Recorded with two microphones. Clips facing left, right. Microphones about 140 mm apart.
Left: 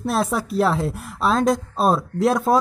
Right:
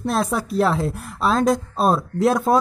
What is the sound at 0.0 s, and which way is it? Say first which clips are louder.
A woman's voice: even; centre (ahead or behind).